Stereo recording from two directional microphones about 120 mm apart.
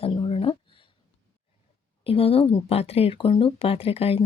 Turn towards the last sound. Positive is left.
turn(degrees=55)  # may be behind; listen again after turning